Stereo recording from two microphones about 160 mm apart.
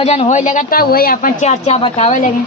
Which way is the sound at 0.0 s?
40° left (ahead or behind).